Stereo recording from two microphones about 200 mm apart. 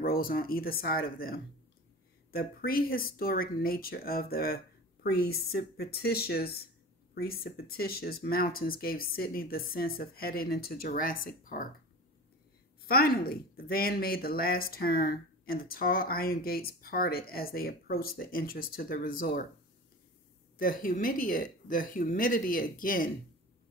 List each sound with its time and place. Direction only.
0.0 s speech: 45° left (ahead or behind)
12.8 s speech: 50° left (ahead or behind)
20.5 s speech: 45° left (ahead or behind)